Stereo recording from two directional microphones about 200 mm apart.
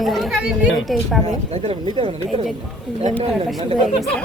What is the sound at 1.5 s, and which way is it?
Speech, 30° right (ahead or behind).